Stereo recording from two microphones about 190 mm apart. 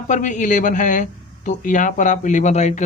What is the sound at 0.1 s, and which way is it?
Speech, 40° left (ahead or behind).